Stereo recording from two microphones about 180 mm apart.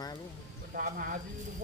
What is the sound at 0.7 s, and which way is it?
Speech, 50° right (ahead or behind).